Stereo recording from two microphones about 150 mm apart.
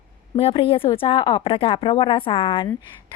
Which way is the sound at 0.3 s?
40° left (ahead or behind).